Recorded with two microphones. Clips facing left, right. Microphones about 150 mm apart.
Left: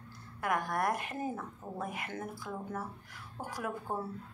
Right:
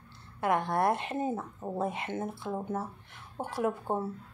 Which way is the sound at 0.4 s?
25° right (ahead or behind).